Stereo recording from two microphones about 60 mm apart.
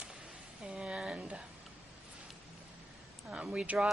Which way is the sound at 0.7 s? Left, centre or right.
Centre.